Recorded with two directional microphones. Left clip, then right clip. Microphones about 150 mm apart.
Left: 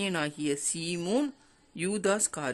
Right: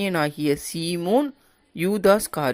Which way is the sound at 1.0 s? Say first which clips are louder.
Right 9 dB; 10° right (ahead or behind).